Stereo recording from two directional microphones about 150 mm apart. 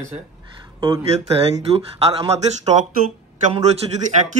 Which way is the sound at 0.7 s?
20° right (ahead or behind).